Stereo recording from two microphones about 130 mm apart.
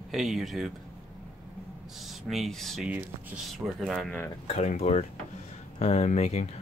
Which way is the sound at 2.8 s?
10° right (ahead or behind).